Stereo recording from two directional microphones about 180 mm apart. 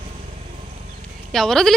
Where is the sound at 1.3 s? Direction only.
Centre (ahead or behind).